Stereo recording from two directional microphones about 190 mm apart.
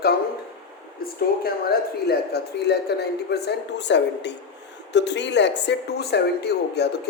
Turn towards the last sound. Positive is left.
turn(degrees=60)  # may be behind; listen again after turning